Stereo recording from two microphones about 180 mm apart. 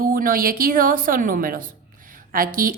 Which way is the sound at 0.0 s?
50° right (ahead or behind).